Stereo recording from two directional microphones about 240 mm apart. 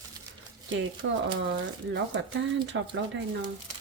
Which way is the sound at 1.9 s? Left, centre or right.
Right.